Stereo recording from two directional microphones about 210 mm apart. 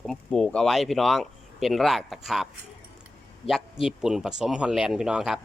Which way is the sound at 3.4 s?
25° left (ahead or behind).